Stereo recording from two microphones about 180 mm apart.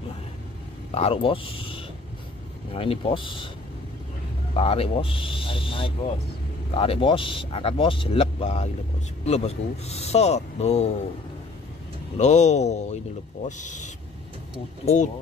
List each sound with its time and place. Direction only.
0.9 s speech: 30° left (ahead or behind)
4.6 s speech: 30° left (ahead or behind)
12.2 s speech: 40° left (ahead or behind)